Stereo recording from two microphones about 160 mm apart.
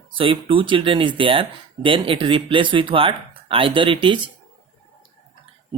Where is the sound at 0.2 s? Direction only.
35° right (ahead or behind).